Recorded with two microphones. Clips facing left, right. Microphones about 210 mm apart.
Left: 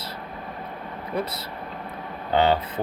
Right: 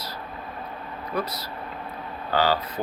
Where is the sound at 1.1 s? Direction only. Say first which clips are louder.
Left 1 dB; 25° left (ahead or behind).